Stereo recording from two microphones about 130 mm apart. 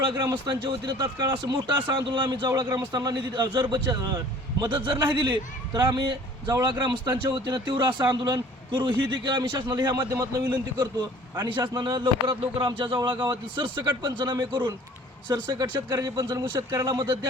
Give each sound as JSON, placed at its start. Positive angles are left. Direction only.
{"t": 0.2, "sound": "speech", "side_deg": -30}
{"t": 2.5, "sound": "speech", "side_deg": -25}